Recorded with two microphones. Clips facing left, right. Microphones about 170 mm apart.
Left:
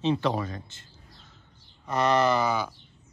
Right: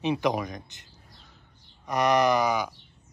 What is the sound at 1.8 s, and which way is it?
Speech, 15° right (ahead or behind).